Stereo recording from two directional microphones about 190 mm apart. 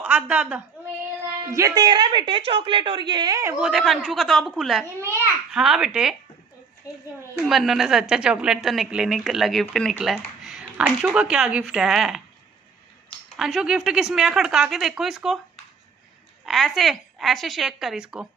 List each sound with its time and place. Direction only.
0.0 s a woman's voice: 5° right (ahead or behind)
1.5 s a woman's voice: 20° right (ahead or behind)
3.5 s a woman's voice: 5° right (ahead or behind)
7.4 s a woman's voice: centre (ahead or behind)
13.4 s a woman's voice: centre (ahead or behind)
16.4 s a woman's voice: centre (ahead or behind)